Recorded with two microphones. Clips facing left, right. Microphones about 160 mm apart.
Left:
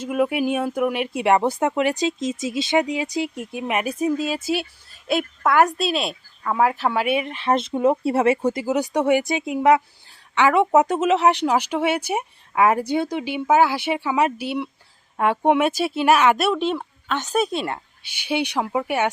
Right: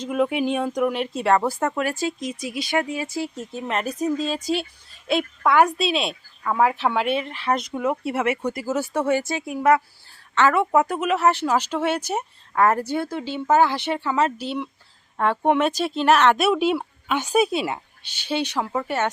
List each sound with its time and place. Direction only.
0.0 s speech: 5° left (ahead or behind); by 8.6 s 30° left (ahead or behind)
8.6 s speech: 15° left (ahead or behind)
16.5 s speech: 10° right (ahead or behind)
18.0 s speech: 10° left (ahead or behind)